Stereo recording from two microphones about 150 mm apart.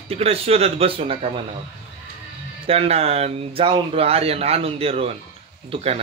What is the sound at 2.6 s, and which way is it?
Speech, 40° right (ahead or behind).